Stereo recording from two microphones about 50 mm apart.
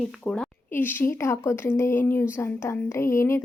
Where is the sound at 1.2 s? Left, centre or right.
Left.